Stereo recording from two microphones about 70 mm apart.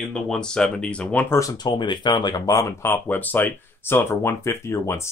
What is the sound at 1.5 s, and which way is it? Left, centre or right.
Speech, left.